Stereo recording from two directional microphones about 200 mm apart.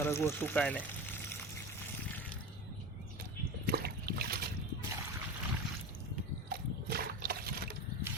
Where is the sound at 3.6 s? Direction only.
50° right (ahead or behind).